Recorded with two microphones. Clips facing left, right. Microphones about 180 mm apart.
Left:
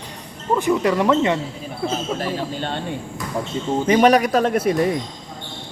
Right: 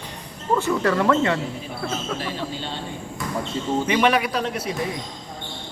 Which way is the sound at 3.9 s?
40° left (ahead or behind).